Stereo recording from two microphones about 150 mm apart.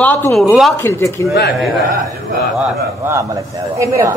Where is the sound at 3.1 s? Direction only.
20° right (ahead or behind).